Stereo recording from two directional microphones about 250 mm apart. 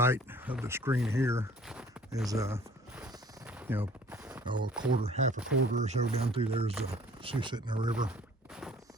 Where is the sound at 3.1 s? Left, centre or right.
Centre.